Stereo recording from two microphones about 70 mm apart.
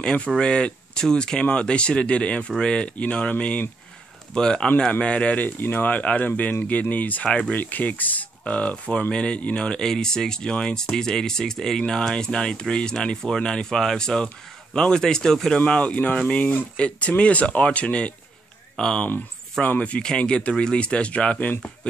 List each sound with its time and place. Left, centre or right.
0.0 s speech: centre
5.6 s speech: left
7.2 s speech: centre
7.5 s speech: left
15.6 s speech: centre